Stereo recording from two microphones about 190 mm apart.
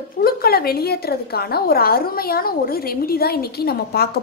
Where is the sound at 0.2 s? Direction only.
50° left (ahead or behind).